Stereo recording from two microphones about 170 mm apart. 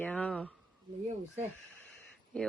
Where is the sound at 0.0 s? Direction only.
5° left (ahead or behind).